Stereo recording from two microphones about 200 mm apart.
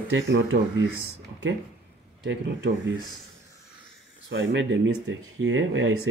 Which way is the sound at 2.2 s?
60° right (ahead or behind).